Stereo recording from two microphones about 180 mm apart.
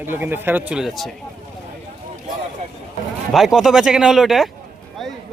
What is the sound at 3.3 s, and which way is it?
A man's voice, centre (ahead or behind).